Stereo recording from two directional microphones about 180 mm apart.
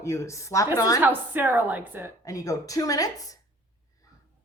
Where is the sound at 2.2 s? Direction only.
20° left (ahead or behind).